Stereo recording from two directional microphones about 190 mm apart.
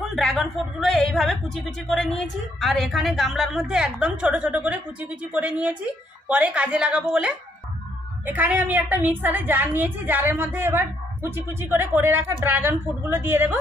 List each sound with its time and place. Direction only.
0.0 s a woman's voice: centre (ahead or behind)